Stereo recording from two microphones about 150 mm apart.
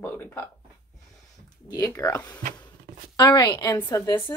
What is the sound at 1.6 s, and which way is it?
A woman's voice, 20° left (ahead or behind).